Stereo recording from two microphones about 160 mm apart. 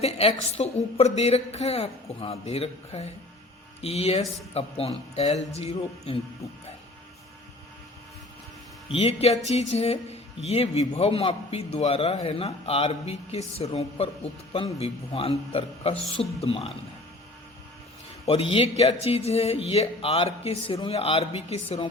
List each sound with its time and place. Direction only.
0.0 s speech: 40° left (ahead or behind)
8.9 s speech: 40° left (ahead or behind)
18.3 s speech: 35° left (ahead or behind)